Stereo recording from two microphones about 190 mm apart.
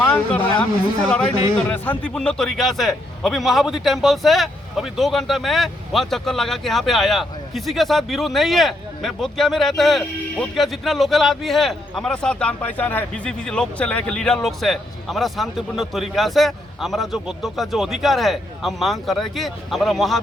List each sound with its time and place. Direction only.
0.0 s a man's voice: 10° left (ahead or behind)